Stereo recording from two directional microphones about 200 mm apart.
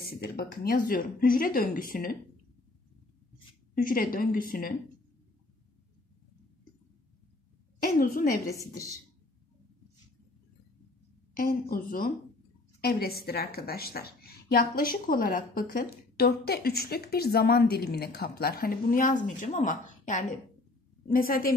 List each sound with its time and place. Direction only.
0.1 s a woman's voice: 50° left (ahead or behind)
3.7 s a woman's voice: 45° left (ahead or behind)
7.8 s a woman's voice: 45° left (ahead or behind)
8.5 s a woman's voice: 15° left (ahead or behind)
11.3 s a woman's voice: 45° left (ahead or behind)